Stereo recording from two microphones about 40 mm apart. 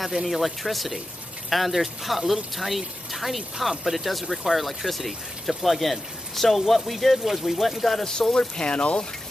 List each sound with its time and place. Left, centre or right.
0.0 s speech: centre
8.3 s speech: left